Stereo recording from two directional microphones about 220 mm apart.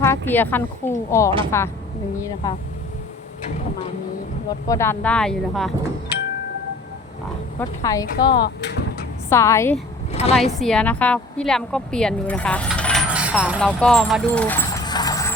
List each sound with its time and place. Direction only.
0.0 s speech: 10° left (ahead or behind)
4.7 s a woman's voice: 10° left (ahead or behind)
7.8 s speech: 15° left (ahead or behind)
8.0 s speech: 50° left (ahead or behind)
9.3 s speech: 10° left (ahead or behind)
10.1 s speech: 30° left (ahead or behind)
10.6 s a woman's voice: 5° left (ahead or behind)
13.1 s vehicle: 5° right (ahead or behind)
13.7 s a woman's voice: 5° left (ahead or behind)
14.8 s vehicle: 15° left (ahead or behind)